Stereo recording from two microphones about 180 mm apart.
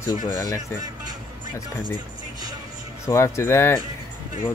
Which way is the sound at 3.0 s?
15° left (ahead or behind).